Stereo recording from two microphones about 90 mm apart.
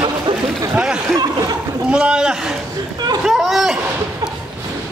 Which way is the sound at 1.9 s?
10° right (ahead or behind).